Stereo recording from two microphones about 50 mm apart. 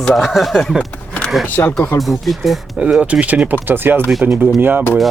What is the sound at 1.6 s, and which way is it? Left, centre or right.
Speech, left.